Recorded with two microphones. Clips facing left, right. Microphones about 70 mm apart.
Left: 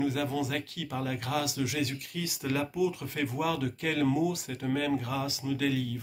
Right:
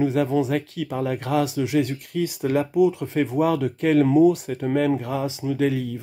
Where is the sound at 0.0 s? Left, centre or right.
Right.